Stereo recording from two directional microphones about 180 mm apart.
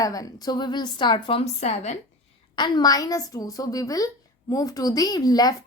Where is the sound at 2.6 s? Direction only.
20° left (ahead or behind).